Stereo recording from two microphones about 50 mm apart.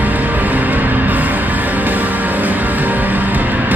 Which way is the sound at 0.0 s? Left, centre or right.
Right.